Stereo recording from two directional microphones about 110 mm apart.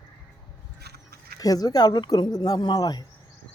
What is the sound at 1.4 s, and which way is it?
Speech, 35° left (ahead or behind).